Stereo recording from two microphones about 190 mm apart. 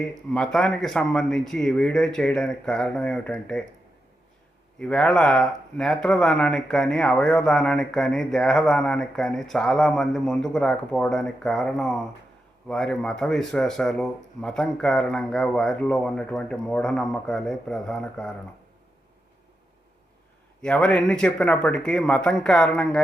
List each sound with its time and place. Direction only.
0.0 s speech: 5° left (ahead or behind)
4.8 s speech: 5° left (ahead or behind)
20.6 s speech: 5° left (ahead or behind)